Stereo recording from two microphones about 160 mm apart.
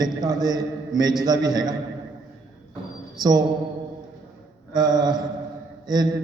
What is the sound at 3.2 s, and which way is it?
Speech, 25° right (ahead or behind).